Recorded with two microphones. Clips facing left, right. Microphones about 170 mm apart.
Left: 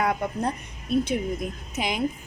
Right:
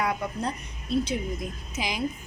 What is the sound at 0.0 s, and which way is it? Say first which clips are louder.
A woman's voice: left 3 dB; 50° left (ahead or behind).